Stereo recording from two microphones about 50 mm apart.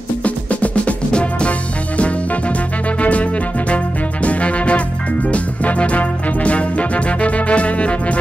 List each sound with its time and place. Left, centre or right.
0.2 s music: left